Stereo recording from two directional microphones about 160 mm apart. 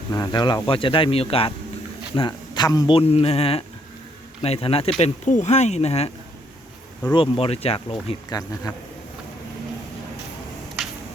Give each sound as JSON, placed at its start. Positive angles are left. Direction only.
{"t": 0.1, "sound": "speech", "side_deg": 25}
{"t": 2.9, "sound": "speech", "side_deg": 35}
{"t": 7.1, "sound": "speech", "side_deg": 35}
{"t": 8.3, "sound": "speech", "side_deg": 25}